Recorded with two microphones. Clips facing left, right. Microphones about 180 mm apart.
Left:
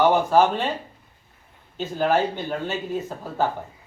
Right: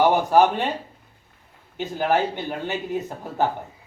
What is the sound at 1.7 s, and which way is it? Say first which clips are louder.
A man's voice: left 1 dB; 15° right (ahead or behind).